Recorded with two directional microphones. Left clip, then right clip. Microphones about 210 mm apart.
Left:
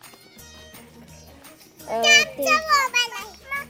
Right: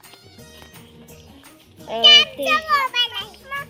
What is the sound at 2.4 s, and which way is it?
Children playing, 30° left (ahead or behind).